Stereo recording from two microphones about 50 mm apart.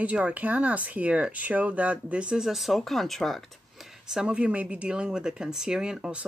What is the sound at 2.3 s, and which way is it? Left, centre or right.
Speech, centre.